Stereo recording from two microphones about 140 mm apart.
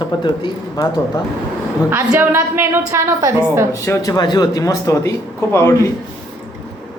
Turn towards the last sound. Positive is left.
turn(degrees=20)  # may be behind; listen again after turning